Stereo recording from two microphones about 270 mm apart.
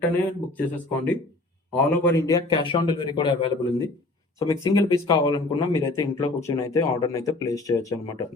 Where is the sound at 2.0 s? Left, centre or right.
Centre.